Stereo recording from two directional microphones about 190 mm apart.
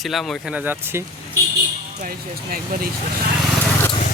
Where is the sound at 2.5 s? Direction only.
45° right (ahead or behind).